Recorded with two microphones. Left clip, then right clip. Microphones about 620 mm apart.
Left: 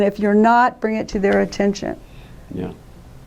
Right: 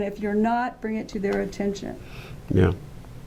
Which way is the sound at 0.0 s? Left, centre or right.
Left.